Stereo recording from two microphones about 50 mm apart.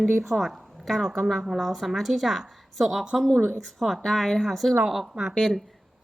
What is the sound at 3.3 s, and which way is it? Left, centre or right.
Speech, right.